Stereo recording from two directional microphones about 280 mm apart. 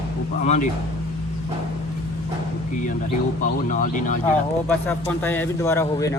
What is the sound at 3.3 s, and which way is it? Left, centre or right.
Speech, left.